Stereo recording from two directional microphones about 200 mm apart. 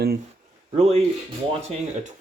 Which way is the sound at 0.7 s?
30° right (ahead or behind).